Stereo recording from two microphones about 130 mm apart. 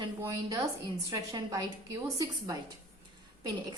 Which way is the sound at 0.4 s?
25° right (ahead or behind).